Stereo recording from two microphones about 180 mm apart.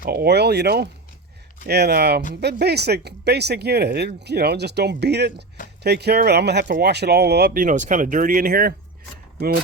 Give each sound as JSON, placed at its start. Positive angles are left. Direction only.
{"t": 0.0, "sound": "speech", "side_deg": -60}